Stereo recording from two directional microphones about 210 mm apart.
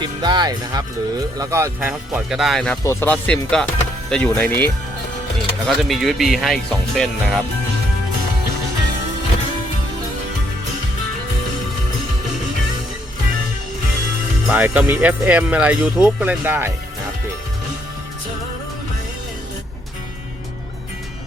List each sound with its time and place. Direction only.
0.0 s speech: 20° right (ahead or behind); by 2.7 s centre (ahead or behind)
2.8 s speech: 10° left (ahead or behind)
14.4 s speech: 5° right (ahead or behind)